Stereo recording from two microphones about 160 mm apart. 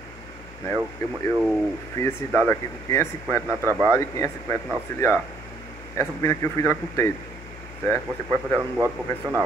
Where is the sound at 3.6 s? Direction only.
20° right (ahead or behind).